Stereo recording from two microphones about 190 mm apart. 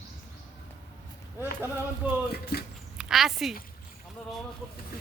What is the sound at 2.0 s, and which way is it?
Speech, 10° right (ahead or behind).